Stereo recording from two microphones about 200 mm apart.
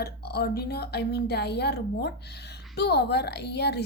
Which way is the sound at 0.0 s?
50° left (ahead or behind).